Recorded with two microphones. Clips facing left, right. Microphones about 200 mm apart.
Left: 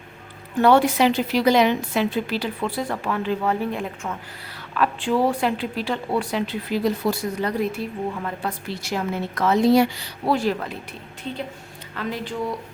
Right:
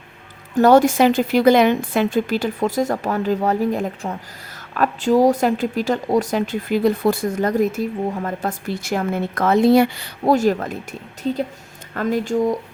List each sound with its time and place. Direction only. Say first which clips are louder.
0.6 s a woman's voice: right 4 dB; 45° right (ahead or behind)